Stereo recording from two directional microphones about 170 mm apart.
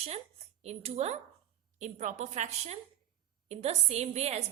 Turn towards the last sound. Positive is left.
turn(degrees=-40)  # may be behind; listen again after turning